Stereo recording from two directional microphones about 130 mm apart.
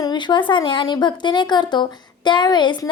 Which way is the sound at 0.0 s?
35° left (ahead or behind).